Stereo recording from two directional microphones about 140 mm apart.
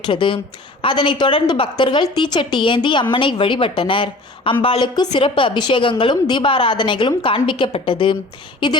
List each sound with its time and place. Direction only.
0.0 s a woman's voice: 35° left (ahead or behind)